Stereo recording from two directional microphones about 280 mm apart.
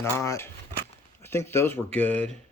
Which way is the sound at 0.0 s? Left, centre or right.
Centre.